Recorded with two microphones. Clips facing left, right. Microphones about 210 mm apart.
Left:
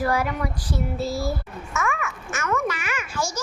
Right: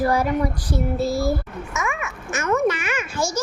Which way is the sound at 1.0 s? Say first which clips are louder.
Right 5 dB; 20° right (ahead or behind).